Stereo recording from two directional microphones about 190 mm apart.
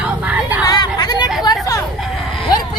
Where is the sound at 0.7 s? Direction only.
20° left (ahead or behind).